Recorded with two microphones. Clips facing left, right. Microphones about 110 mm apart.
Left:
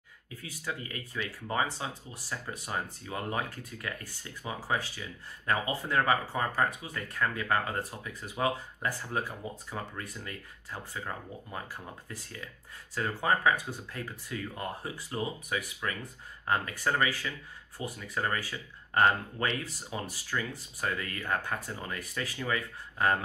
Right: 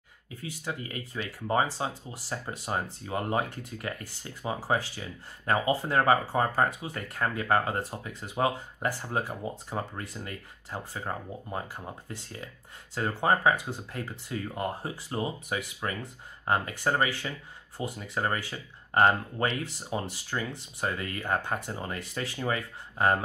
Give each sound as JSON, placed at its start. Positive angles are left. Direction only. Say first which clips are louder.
{"t": 0.4, "sound": "speech", "louder": "right 2 dB", "side_deg": -30}